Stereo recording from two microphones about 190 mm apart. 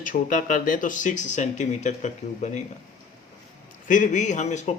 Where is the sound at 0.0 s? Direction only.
45° left (ahead or behind).